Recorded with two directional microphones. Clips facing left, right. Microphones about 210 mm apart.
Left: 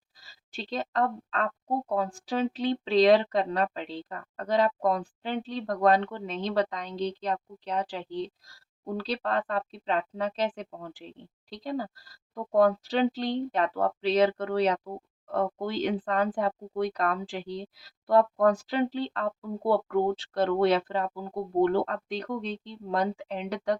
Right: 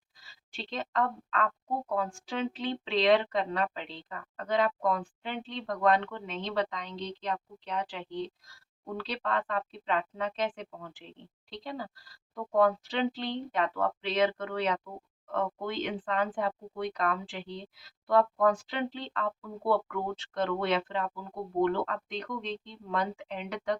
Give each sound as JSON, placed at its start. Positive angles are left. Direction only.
{"t": 0.2, "sound": "speech", "side_deg": 40}